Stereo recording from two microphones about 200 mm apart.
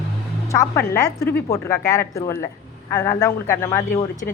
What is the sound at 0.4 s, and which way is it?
A woman's voice, 15° left (ahead or behind).